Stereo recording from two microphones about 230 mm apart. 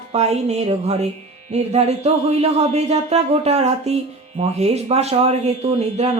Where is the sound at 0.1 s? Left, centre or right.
Right.